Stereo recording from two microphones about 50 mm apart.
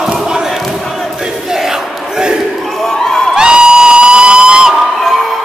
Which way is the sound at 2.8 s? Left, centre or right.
Centre.